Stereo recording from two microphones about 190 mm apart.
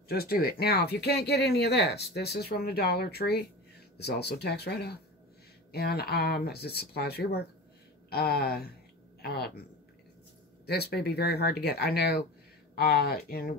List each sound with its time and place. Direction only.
0.1 s speech: 50° left (ahead or behind)
10.7 s speech: 55° left (ahead or behind)